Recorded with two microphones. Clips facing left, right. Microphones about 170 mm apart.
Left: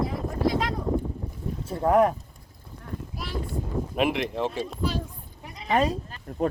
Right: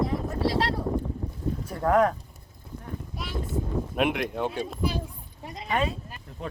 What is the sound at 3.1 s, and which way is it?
Wind noise, centre (ahead or behind).